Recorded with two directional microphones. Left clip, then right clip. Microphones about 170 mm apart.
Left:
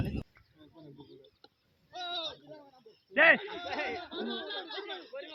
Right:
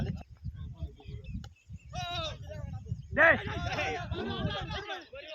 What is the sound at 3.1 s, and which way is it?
Speech, 35° left (ahead or behind).